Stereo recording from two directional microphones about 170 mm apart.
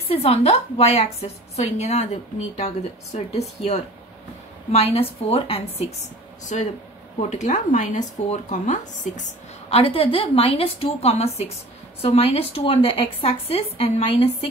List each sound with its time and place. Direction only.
0.1 s speech: 35° left (ahead or behind)